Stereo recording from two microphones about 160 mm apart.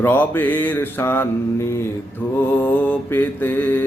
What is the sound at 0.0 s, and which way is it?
Mantra, 10° left (ahead or behind).